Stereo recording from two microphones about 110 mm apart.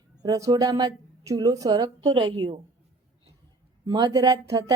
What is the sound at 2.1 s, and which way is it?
Speech, 50° right (ahead or behind).